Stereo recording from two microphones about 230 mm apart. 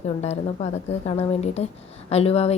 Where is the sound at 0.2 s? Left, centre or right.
Left.